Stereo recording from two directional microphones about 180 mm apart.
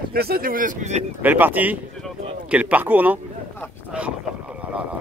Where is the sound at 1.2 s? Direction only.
10° right (ahead or behind).